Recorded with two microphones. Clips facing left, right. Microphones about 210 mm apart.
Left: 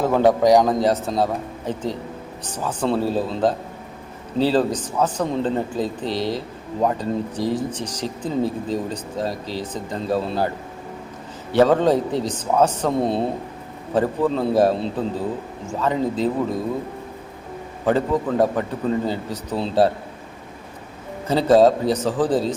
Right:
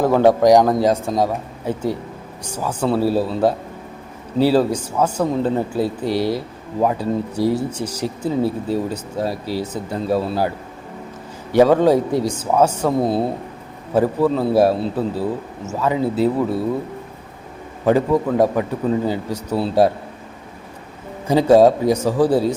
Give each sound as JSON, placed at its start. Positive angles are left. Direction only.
{"t": 0.0, "sound": "speech", "side_deg": -10}
{"t": 11.5, "sound": "speech", "side_deg": -10}
{"t": 17.8, "sound": "speech", "side_deg": -10}
{"t": 21.2, "sound": "speech", "side_deg": -10}